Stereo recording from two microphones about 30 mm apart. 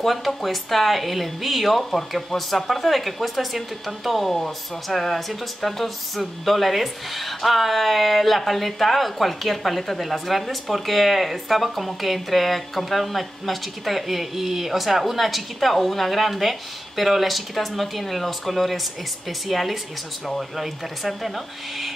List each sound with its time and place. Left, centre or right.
0.0 s speech: centre